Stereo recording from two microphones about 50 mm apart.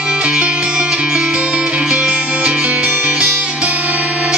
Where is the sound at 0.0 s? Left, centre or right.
Right.